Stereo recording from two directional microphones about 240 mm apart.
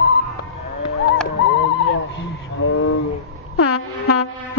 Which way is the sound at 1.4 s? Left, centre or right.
Left.